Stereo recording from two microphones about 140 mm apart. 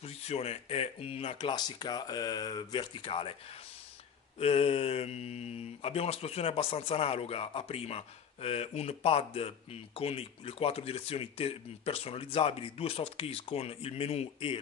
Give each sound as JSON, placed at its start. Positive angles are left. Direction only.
{"t": 0.0, "sound": "speech", "side_deg": 50}
{"t": 4.4, "sound": "speech", "side_deg": 45}